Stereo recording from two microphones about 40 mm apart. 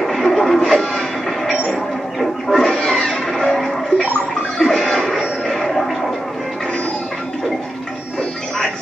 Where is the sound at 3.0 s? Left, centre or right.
Centre.